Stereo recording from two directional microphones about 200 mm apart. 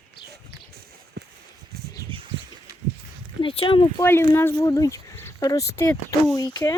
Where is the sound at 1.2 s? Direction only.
60° right (ahead or behind).